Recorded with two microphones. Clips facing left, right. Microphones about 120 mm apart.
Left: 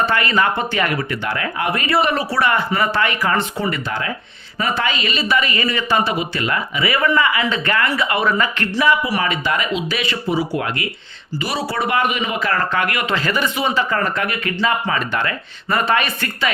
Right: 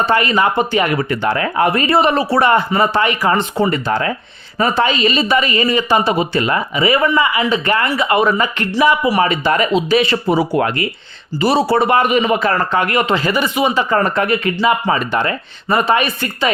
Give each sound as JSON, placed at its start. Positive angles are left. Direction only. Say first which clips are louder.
{"t": 0.1, "sound": "speech", "louder": "right 4 dB", "side_deg": -20}
{"t": 1.1, "sound": "speech", "louder": "right 6 dB", "side_deg": -30}
{"t": 3.6, "sound": "a man's voice", "louder": "right 7 dB", "side_deg": -35}
{"t": 9.2, "sound": "a man's voice", "louder": "right 5 dB", "side_deg": -35}
{"t": 10.2, "sound": "speech", "louder": "right 6 dB", "side_deg": -50}
{"t": 11.3, "sound": "a man's voice", "louder": "right 9 dB", "side_deg": -30}
{"t": 13.1, "sound": "speech", "louder": "right 4 dB", "side_deg": -10}
{"t": 13.9, "sound": "speech", "louder": "right 6 dB", "side_deg": -30}